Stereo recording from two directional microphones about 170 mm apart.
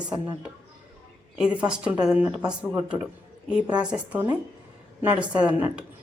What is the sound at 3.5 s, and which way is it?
A woman's voice, 5° right (ahead or behind).